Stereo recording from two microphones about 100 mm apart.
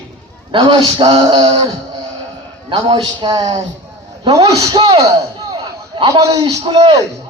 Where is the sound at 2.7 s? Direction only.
40° right (ahead or behind).